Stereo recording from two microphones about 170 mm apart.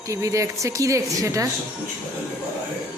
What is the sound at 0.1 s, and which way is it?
Speech, 20° right (ahead or behind).